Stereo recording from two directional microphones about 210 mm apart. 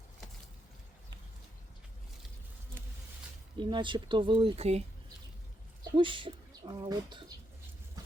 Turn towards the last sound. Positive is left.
turn(degrees=-20)  # may be behind; listen again after turning